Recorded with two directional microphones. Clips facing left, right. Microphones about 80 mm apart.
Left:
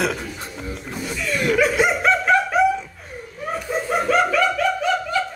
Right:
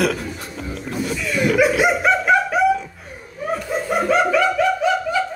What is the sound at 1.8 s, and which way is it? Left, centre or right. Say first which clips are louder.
Chicken: right 1 dB; centre.